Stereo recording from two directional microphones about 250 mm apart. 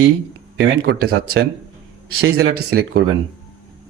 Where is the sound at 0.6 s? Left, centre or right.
Right.